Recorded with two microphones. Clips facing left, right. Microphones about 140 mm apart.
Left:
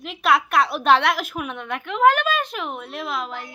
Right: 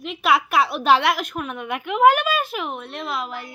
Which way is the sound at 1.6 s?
10° right (ahead or behind).